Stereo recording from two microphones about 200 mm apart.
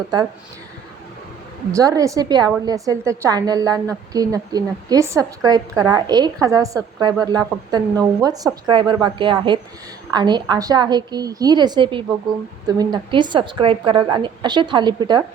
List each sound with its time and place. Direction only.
1.7 s a woman's voice: 15° right (ahead or behind)